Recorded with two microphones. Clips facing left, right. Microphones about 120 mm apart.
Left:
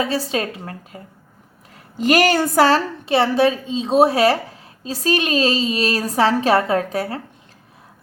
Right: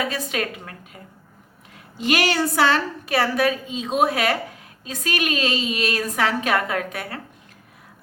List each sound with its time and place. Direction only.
0.0 s a woman's voice: 30° left (ahead or behind)
2.0 s a woman's voice: 40° left (ahead or behind)
3.1 s a woman's voice: 25° left (ahead or behind)